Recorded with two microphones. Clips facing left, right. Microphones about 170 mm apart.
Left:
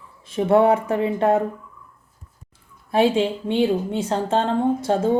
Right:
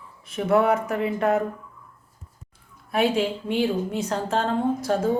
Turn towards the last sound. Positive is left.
turn(degrees=25)  # may be behind; listen again after turning